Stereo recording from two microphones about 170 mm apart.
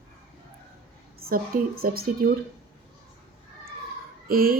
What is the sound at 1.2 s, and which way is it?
Speech, 60° right (ahead or behind).